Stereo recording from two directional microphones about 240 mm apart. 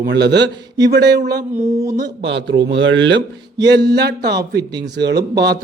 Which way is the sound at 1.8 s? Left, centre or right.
Centre.